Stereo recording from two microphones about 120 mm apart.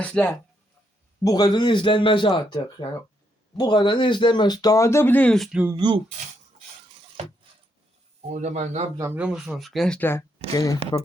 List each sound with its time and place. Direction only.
0.0 s speech: 10° left (ahead or behind)
1.2 s speech: 30° left (ahead or behind); by 5.4 s 15° left (ahead or behind)
5.4 s speech: 5° right (ahead or behind)
5.7 s speech: 40° right (ahead or behind)
8.3 s speech: 80° right
9.1 s speech: 5° right (ahead or behind)
10.0 s speech: 20° left (ahead or behind)